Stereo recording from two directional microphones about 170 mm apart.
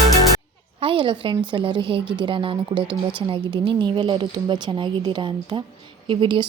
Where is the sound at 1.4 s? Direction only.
30° right (ahead or behind).